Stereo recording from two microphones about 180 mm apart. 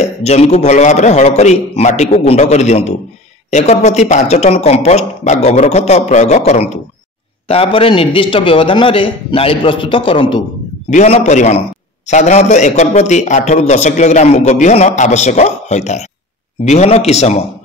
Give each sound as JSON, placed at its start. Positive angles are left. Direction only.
{"t": 0.0, "sound": "a man's voice", "side_deg": 35}
{"t": 10.9, "sound": "a man's voice", "side_deg": 40}